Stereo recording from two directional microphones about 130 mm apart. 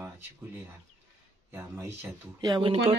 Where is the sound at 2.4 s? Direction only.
35° right (ahead or behind).